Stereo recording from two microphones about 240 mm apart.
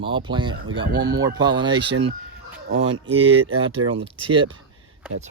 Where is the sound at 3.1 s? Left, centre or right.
Right.